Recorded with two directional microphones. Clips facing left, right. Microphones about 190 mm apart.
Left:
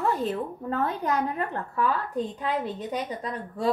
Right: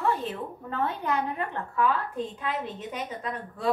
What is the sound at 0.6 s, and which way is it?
A woman's voice, 40° left (ahead or behind).